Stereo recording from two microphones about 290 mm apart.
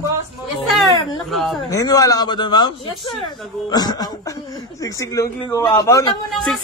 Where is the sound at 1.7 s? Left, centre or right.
Centre.